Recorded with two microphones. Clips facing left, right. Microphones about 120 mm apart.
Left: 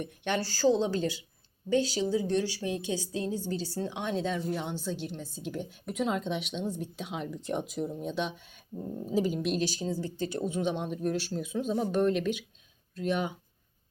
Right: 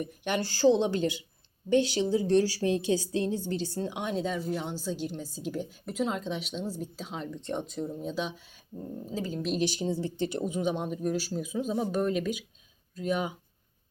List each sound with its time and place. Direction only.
0.0 s a woman's voice: 15° right (ahead or behind)
2.0 s speech: 30° right (ahead or behind)
3.2 s speech: 5° left (ahead or behind)
3.7 s a woman's voice: 15° right (ahead or behind); by 9.4 s 15° left (ahead or behind)
9.6 s a woman's voice: 20° right (ahead or behind)
10.4 s speech: 10° right (ahead or behind)